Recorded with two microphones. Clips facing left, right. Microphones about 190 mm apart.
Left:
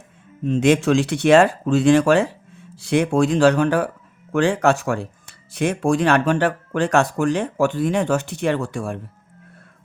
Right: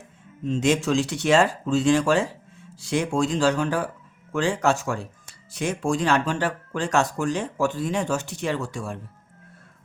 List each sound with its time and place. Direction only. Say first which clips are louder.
0.4 s speech: left 5 dB; 60° left (ahead or behind)